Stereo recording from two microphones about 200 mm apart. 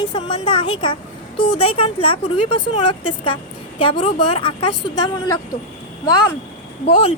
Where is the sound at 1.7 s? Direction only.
25° left (ahead or behind).